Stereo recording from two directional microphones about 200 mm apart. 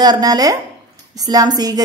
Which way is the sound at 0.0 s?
20° right (ahead or behind).